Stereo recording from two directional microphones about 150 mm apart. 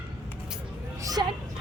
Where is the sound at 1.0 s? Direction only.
25° right (ahead or behind).